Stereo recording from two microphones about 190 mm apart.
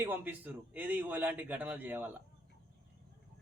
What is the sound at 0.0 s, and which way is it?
A man's voice, 10° right (ahead or behind).